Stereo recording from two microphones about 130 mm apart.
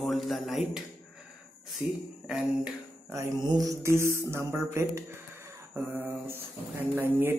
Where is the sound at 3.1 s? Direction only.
30° right (ahead or behind).